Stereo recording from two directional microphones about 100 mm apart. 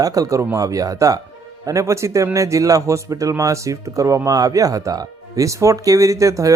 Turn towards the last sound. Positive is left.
turn(degrees=-30)  # may be behind; listen again after turning